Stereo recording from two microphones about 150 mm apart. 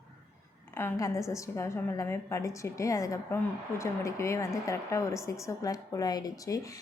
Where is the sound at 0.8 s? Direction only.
20° left (ahead or behind).